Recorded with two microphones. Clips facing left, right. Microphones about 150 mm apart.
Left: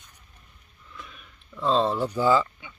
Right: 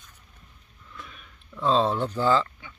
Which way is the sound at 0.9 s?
Centre (ahead or behind).